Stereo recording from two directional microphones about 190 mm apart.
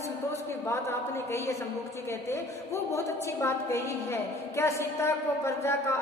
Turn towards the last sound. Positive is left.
turn(degrees=15)  # may be behind; listen again after turning